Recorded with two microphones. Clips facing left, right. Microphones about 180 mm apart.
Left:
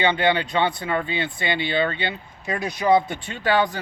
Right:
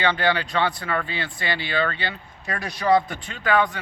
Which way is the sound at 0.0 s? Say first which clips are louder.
Left 2 dB; 25° left (ahead or behind).